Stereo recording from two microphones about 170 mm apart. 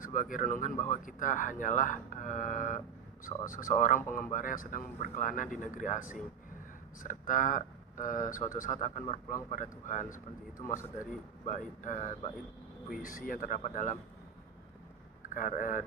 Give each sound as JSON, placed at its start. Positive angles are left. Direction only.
{"t": 0.0, "sound": "speech", "side_deg": 50}
{"t": 15.4, "sound": "speech", "side_deg": 55}